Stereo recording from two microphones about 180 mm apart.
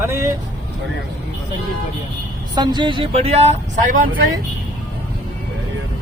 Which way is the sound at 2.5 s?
25° right (ahead or behind).